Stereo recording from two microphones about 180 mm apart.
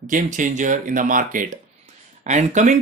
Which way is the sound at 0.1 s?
45° right (ahead or behind).